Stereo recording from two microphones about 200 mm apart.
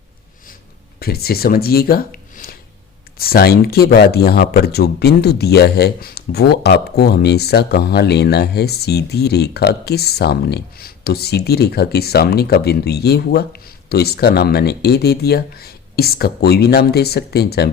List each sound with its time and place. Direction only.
0.9 s speech: 50° left (ahead or behind)